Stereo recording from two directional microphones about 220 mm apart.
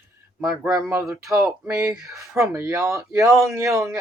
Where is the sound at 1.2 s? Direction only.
15° right (ahead or behind).